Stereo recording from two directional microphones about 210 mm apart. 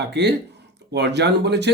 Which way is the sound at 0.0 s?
55° right (ahead or behind).